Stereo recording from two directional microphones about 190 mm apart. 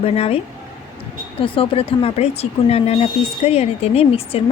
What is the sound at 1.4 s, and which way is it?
Speech, 30° left (ahead or behind).